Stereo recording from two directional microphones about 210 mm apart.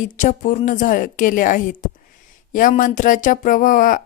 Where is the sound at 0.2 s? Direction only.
35° left (ahead or behind).